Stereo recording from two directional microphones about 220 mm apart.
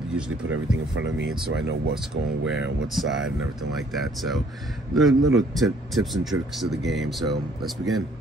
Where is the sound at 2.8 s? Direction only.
Centre (ahead or behind).